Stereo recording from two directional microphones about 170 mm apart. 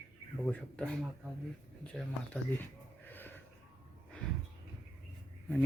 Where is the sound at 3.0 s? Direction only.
10° left (ahead or behind).